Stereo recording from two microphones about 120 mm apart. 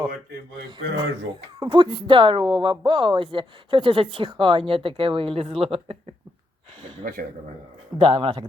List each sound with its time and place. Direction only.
1.5 s a woman's voice: 40° right (ahead or behind); by 6.0 s 55° right (ahead or behind)
7.9 s a woman's voice: 50° right (ahead or behind)